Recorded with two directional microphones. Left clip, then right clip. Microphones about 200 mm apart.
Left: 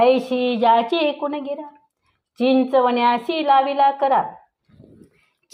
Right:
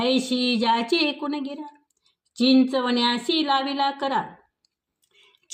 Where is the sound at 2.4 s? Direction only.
20° right (ahead or behind).